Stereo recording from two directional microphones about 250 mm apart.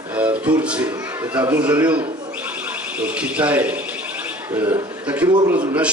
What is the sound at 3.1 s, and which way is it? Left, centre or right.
A man's voice, centre.